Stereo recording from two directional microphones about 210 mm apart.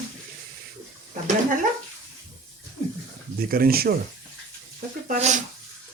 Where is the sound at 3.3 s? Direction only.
45° right (ahead or behind).